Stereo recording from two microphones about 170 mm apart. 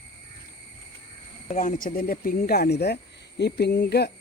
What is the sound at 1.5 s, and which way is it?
Speech, 50° left (ahead or behind).